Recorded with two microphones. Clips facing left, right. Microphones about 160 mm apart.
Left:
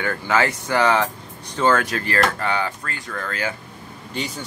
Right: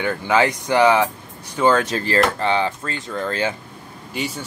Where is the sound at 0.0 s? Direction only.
20° right (ahead or behind).